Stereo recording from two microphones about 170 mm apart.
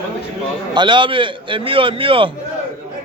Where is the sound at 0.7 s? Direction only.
30° right (ahead or behind).